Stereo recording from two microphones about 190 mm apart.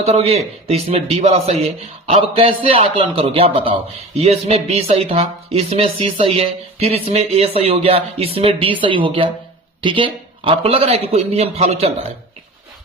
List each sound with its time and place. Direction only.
0.0 s a man's voice: 30° right (ahead or behind)